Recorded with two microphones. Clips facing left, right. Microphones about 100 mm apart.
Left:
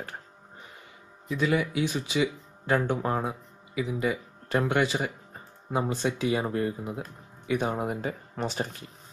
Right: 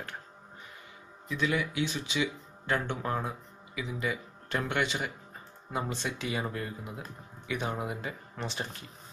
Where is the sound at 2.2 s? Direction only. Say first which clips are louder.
Left 5 dB; 35° left (ahead or behind).